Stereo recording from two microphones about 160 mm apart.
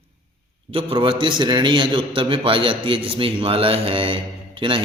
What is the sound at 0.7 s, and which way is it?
Speech, 35° right (ahead or behind).